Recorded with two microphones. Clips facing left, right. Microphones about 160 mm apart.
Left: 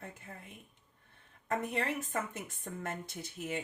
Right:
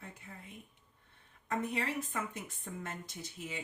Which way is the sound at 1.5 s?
50° left (ahead or behind).